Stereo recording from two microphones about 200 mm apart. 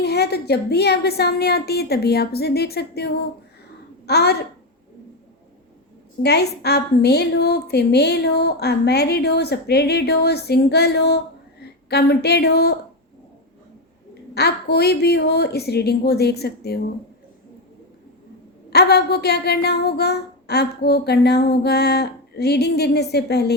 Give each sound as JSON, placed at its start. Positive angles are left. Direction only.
{"t": 0.0, "sound": "a woman's voice", "side_deg": 55}
{"t": 6.2, "sound": "a woman's voice", "side_deg": 55}
{"t": 14.3, "sound": "a woman's voice", "side_deg": 55}
{"t": 18.7, "sound": "a woman's voice", "side_deg": 55}